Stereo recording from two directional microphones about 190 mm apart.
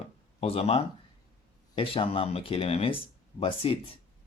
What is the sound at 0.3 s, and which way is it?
Speech, 30° left (ahead or behind).